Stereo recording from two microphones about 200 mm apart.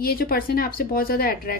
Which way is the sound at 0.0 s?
45° left (ahead or behind).